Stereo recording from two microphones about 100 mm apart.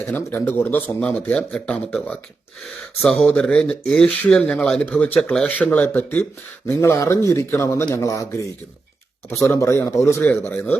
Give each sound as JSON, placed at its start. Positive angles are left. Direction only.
{"t": 0.0, "sound": "a man's voice", "side_deg": 20}
{"t": 1.0, "sound": "a man's voice", "side_deg": 10}
{"t": 9.4, "sound": "a man's voice", "side_deg": 30}